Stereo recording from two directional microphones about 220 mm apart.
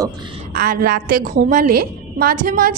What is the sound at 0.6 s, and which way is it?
A woman's voice, 40° right (ahead or behind).